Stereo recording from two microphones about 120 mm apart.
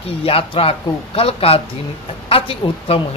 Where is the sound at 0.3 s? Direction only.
50° left (ahead or behind).